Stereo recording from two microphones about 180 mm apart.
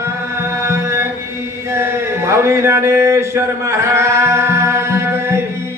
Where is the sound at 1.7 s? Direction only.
15° right (ahead or behind).